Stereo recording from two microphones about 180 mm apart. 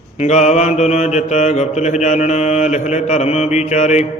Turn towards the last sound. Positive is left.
turn(degrees=40)  # may be behind; listen again after turning